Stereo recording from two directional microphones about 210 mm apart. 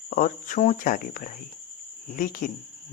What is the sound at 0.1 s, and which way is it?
Speech, 40° left (ahead or behind).